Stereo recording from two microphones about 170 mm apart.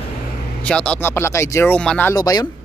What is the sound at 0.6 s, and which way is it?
Speech, 5° left (ahead or behind).